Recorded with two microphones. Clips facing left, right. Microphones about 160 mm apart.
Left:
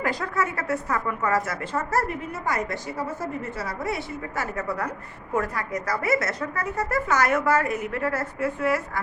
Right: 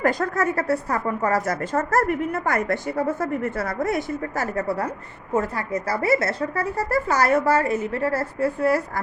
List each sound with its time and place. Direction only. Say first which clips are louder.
0.0 s a woman's voice: right 5 dB; 45° right (ahead or behind)